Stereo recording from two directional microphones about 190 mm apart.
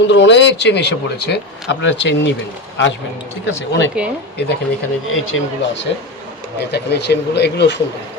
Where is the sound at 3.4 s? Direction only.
70° left (ahead or behind).